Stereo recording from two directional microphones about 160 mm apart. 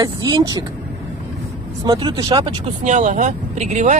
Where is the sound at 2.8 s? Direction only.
50° right (ahead or behind).